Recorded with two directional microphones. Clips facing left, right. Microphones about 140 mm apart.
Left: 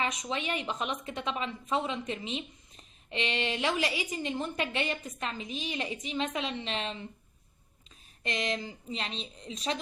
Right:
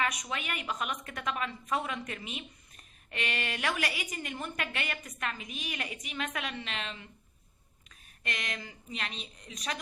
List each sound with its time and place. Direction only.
0.0 s a woman's voice: 25° left (ahead or behind)